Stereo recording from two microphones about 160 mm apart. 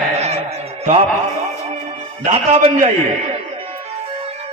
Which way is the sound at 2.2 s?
45° right (ahead or behind).